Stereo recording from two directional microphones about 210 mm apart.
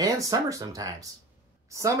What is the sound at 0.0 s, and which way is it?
Speech, 15° right (ahead or behind).